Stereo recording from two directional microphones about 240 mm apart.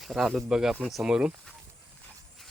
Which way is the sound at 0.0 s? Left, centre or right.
Centre.